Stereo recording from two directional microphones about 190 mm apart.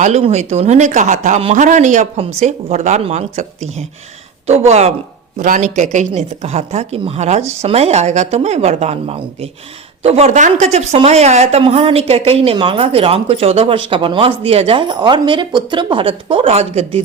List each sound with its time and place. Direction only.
0.0 s speech: 35° right (ahead or behind)